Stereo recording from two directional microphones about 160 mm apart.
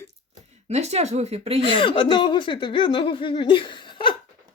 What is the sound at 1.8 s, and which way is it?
Speech, 30° left (ahead or behind).